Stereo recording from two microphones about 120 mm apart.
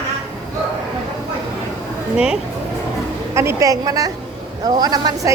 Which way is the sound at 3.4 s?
25° right (ahead or behind).